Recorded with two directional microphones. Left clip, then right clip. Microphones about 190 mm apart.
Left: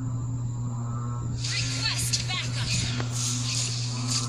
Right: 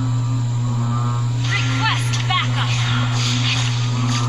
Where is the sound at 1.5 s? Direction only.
50° left (ahead or behind).